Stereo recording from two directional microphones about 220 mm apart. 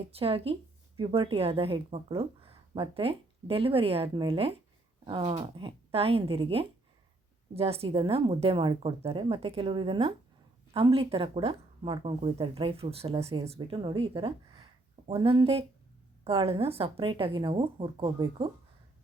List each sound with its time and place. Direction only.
0.1 s speech: 25° right (ahead or behind)